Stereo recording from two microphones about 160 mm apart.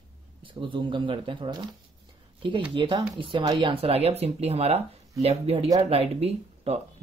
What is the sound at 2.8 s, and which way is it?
Speech, 30° right (ahead or behind).